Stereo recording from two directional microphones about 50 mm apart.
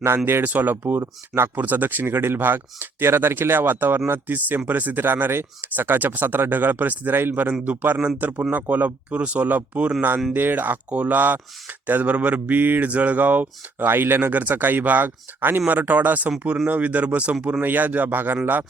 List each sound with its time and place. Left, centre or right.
0.4 s speech: right
13.8 s speech: right
17.6 s speech: right